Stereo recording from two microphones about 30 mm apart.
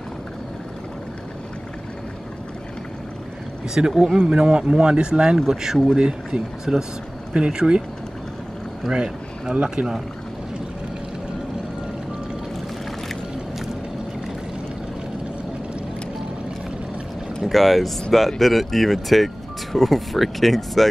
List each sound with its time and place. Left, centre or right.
3.8 s speech: right
4.3 s speech: right
5.5 s speech: centre
5.9 s speech: right
6.6 s speech: centre
7.3 s speech: right
8.9 s speech: right
17.5 s speech: centre